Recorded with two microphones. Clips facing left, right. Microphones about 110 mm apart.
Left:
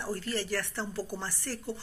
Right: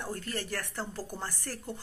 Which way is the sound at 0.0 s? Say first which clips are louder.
Left 3 dB; 50° right (ahead or behind).